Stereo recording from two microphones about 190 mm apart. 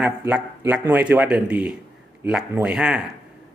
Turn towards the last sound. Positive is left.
turn(degrees=-5)  # may be behind; listen again after turning